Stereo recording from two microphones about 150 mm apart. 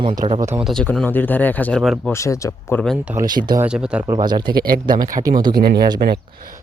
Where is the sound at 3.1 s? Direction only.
25° right (ahead or behind).